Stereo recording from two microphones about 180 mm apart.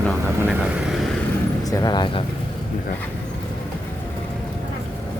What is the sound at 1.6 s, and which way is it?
Speech, 20° left (ahead or behind).